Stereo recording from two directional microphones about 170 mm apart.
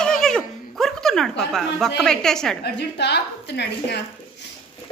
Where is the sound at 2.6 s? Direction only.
80° left.